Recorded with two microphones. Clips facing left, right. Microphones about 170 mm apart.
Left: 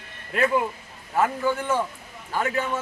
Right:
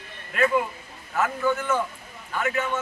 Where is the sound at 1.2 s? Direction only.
30° left (ahead or behind).